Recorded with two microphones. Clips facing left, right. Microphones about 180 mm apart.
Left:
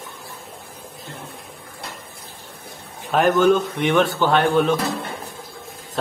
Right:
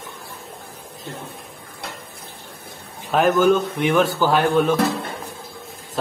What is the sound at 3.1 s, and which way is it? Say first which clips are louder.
Speech: even; centre (ahead or behind).